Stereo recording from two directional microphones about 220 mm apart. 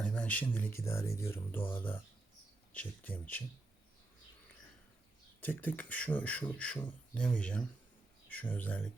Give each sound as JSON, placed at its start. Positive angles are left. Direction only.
{"t": 0.0, "sound": "speech", "side_deg": 5}
{"t": 5.4, "sound": "speech", "side_deg": 10}